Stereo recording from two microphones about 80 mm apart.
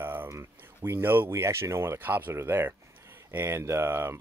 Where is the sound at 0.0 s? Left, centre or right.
Right.